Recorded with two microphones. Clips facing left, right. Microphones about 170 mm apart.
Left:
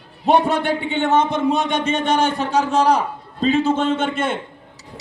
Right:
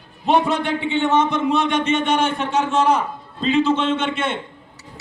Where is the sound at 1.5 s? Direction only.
35° left (ahead or behind).